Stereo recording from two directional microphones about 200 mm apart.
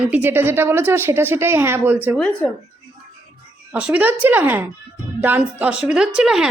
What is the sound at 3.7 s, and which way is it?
A woman's voice, 5° right (ahead or behind).